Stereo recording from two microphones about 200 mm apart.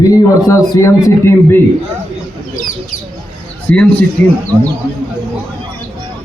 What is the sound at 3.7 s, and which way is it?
Speech, 10° left (ahead or behind).